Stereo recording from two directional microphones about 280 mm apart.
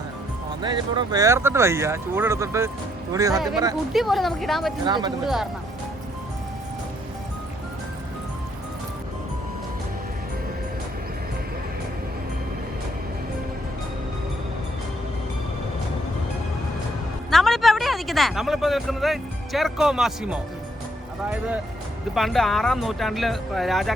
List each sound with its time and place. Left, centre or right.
0.6 s speech: centre
3.9 s speech: centre
4.9 s speech: centre
5.2 s speech: centre
17.3 s speech: centre
22.1 s speech: centre